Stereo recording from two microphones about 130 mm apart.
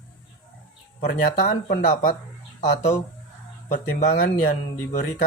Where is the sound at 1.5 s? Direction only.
75° left (ahead or behind).